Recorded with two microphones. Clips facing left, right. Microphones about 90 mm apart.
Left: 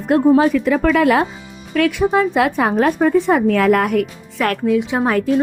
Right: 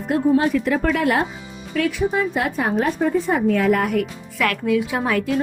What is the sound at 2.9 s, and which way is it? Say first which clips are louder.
Speech: left 5 dB; 70° left (ahead or behind).